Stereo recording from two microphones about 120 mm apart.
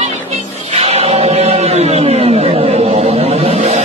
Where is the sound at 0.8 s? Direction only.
60° right (ahead or behind).